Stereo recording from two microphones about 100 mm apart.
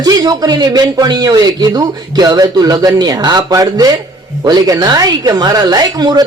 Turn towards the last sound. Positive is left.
turn(degrees=-45)  # may be behind; listen again after turning